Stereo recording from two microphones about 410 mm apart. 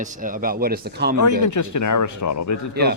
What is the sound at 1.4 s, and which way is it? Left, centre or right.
Speech, left.